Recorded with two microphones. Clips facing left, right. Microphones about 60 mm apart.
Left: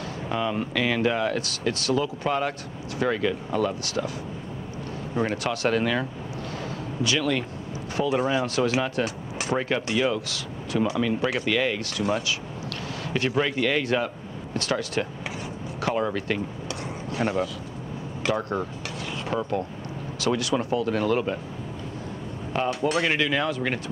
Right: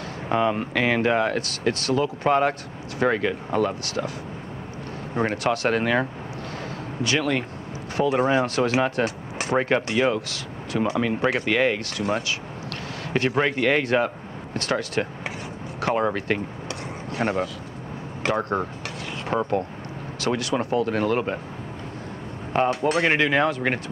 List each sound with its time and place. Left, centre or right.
0.3 s speech: right
5.1 s speech: right
6.6 s a sound: right
7.9 s speech: right
22.5 s speech: right